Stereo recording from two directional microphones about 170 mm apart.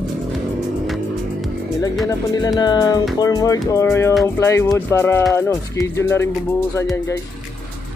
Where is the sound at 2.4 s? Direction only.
25° left (ahead or behind).